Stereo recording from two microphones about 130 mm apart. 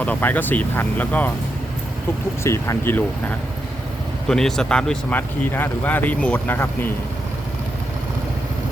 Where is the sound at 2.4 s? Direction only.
20° left (ahead or behind).